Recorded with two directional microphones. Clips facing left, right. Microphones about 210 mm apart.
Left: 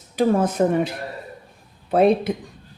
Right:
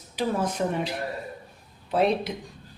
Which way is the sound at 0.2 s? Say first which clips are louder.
Left 8 dB; 50° left (ahead or behind).